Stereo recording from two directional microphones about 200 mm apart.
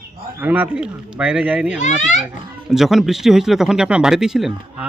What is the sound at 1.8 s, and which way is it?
Speech, 35° left (ahead or behind).